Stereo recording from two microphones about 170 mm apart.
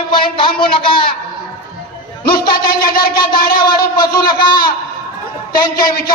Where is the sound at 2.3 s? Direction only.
60° left (ahead or behind).